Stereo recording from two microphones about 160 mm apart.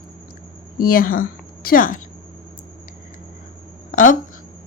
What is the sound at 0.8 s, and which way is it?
A woman's voice, 65° left (ahead or behind).